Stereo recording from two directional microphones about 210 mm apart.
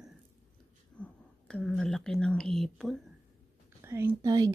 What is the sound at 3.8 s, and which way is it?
Speech, 15° right (ahead or behind).